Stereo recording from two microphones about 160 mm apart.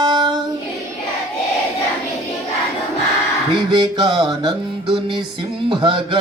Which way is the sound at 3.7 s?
30° right (ahead or behind).